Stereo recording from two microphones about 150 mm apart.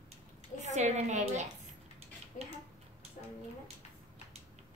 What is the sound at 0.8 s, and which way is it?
Speech, 50° right (ahead or behind).